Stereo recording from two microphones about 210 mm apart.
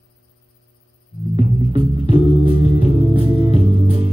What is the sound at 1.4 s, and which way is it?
Music, 25° right (ahead or behind).